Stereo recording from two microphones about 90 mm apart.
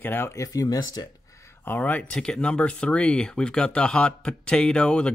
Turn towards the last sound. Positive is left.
turn(degrees=10)  # may be behind; listen again after turning